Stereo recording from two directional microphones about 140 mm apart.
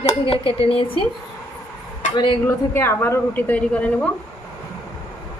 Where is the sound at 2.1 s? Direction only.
30° left (ahead or behind).